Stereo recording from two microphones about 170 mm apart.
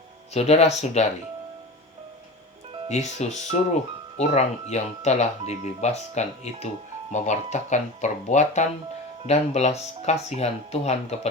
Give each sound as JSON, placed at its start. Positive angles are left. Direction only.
{"t": 0.3, "sound": "speech", "side_deg": 40}
{"t": 2.9, "sound": "speech", "side_deg": 40}